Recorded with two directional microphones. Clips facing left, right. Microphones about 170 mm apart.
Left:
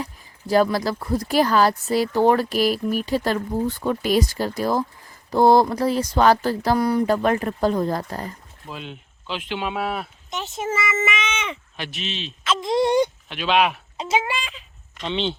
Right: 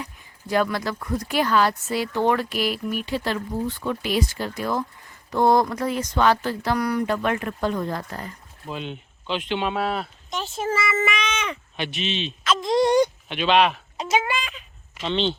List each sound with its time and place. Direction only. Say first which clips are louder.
0.0 s speech: left 4 dB; 35° left (ahead or behind)
8.6 s speech: right 3 dB; centre (ahead or behind)
10.2 s speech: even; 20° left (ahead or behind)
11.1 s a sound: even; 25° left (ahead or behind)
11.8 s speech: right 5 dB; centre (ahead or behind)
12.5 s speech: even; 25° left (ahead or behind)
13.2 s speech: right 1 dB; centre (ahead or behind)
14.0 s speech: even; 25° left (ahead or behind)
15.0 s speech: right 1 dB; 5° left (ahead or behind)